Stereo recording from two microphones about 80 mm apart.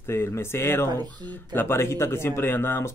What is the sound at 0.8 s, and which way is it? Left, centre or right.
Speech, right.